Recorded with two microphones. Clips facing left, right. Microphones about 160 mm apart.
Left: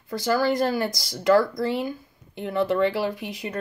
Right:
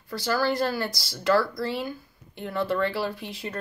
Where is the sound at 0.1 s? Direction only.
20° left (ahead or behind).